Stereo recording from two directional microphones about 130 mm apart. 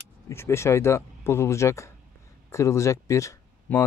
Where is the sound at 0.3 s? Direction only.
20° left (ahead or behind).